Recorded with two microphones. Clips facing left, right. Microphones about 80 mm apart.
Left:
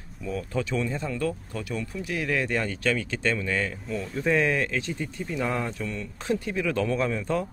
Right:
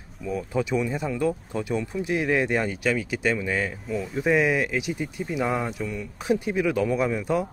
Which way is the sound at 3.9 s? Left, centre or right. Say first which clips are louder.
Right 3 dB; centre.